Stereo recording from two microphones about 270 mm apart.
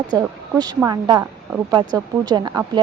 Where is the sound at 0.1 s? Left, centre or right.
Centre.